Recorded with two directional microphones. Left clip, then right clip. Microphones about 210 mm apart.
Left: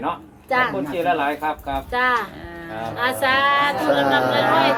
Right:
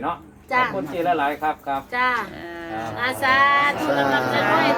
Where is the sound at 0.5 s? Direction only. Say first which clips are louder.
Left 1 dB; centre (ahead or behind).